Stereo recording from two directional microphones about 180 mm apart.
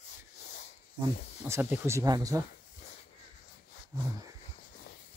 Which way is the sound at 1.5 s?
10° right (ahead or behind).